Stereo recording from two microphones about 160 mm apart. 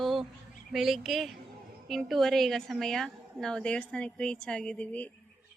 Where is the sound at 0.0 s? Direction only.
Centre (ahead or behind).